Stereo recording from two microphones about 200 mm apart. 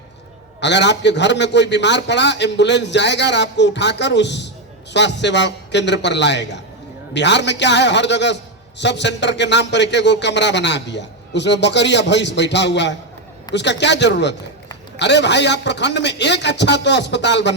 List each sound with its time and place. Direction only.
0.6 s a man's voice: 60° left (ahead or behind)